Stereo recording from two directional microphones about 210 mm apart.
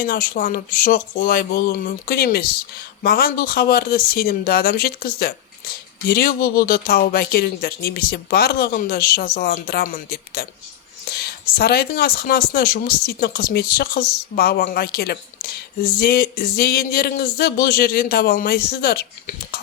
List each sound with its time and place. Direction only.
0.0 s speech: 45° left (ahead or behind)